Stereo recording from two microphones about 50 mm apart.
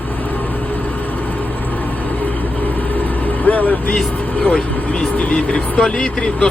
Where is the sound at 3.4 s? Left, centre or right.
Left.